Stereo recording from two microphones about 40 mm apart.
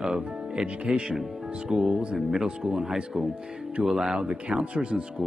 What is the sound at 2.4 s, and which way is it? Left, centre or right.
Speech, right.